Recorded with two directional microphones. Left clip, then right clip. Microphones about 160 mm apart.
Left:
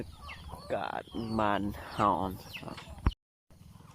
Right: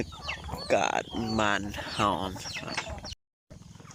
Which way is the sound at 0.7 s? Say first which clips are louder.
Right 9 dB; 15° right (ahead or behind).